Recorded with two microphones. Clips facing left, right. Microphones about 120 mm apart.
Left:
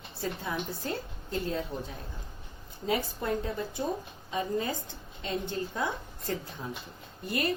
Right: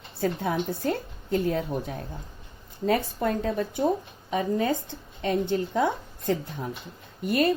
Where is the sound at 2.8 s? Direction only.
80° right.